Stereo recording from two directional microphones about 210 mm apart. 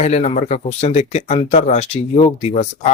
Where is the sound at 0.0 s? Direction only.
30° left (ahead or behind).